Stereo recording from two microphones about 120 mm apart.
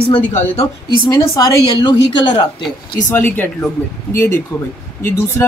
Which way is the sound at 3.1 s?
15° left (ahead or behind).